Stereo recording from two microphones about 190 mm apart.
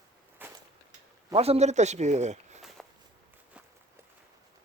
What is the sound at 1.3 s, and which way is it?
Speech, 30° right (ahead or behind).